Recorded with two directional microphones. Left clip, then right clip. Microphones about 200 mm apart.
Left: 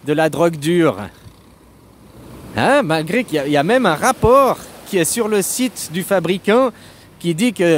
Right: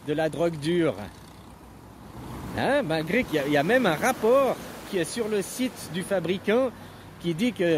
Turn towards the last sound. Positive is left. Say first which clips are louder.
# left 9 dB
turn(degrees=40)  # may be behind; listen again after turning